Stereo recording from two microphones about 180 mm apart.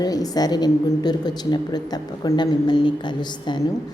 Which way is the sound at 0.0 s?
20° left (ahead or behind).